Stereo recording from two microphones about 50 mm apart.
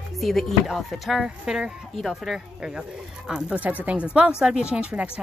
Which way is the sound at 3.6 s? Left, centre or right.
Right.